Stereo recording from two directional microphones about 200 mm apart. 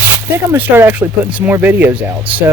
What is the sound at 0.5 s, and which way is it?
Speech, 10° right (ahead or behind).